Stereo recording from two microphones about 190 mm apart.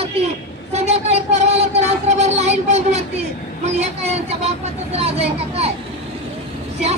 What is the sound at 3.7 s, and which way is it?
Speech, 35° right (ahead or behind).